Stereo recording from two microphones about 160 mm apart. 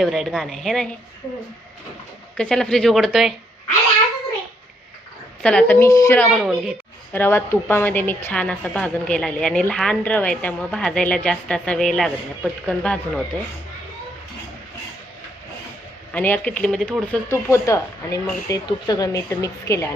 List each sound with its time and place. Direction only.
0.0 s speech: centre (ahead or behind)
2.4 s speech: 5° left (ahead or behind)
5.4 s a woman's voice: 5° left (ahead or behind)
6.1 s speech: centre (ahead or behind)
7.1 s a woman's voice: 15° left (ahead or behind)
16.1 s a woman's voice: 10° left (ahead or behind)